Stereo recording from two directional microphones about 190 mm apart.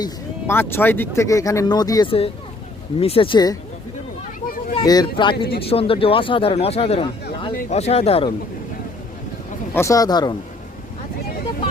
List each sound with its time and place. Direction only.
0.0 s speech: 10° left (ahead or behind)
4.8 s speech: 20° left (ahead or behind)
9.7 s speech: 15° left (ahead or behind)